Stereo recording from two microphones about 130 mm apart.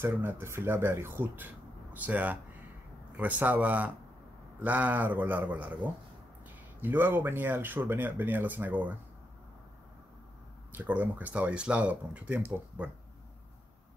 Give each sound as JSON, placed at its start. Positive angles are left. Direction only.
{"t": 0.0, "sound": "speech", "side_deg": -15}
{"t": 6.8, "sound": "speech", "side_deg": -15}
{"t": 10.7, "sound": "speech", "side_deg": -15}